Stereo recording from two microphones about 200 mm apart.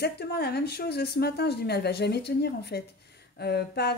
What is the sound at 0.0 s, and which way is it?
A woman's voice, 55° left (ahead or behind).